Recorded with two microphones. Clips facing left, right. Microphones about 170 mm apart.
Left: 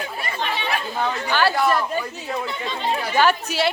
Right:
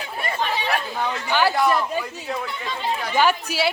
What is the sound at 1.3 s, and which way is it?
Speech, 15° right (ahead or behind).